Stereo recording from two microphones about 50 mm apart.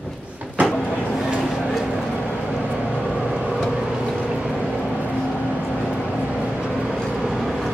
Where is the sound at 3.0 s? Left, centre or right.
Centre.